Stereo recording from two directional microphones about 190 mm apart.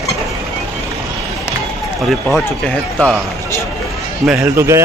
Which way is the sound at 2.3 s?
5° left (ahead or behind).